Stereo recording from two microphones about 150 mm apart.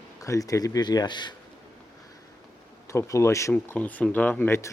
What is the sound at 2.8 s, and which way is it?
Speech, 20° left (ahead or behind).